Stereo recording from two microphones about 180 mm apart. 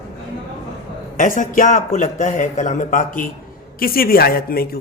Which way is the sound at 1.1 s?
45° left (ahead or behind).